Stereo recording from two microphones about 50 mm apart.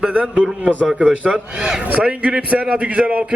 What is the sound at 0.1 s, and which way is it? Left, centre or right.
Speech, right.